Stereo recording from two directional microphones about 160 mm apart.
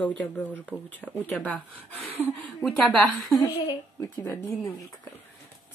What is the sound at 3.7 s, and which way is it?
Speech, 25° left (ahead or behind).